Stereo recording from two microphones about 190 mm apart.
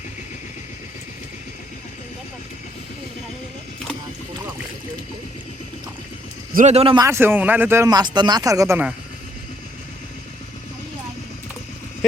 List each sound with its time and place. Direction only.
6.5 s a man's voice: 40° right (ahead or behind)
7.0 s speech: 15° right (ahead or behind)